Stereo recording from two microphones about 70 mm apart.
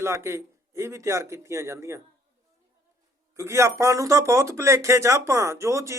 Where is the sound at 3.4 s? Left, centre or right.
Right.